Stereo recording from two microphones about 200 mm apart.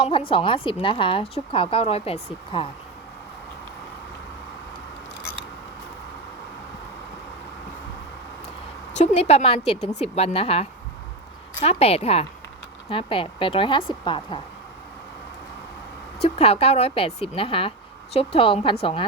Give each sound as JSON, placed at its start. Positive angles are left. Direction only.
{"t": 0.0, "sound": "a woman's voice", "side_deg": 25}
{"t": 9.0, "sound": "a woman's voice", "side_deg": 35}
{"t": 16.2, "sound": "a woman's voice", "side_deg": 30}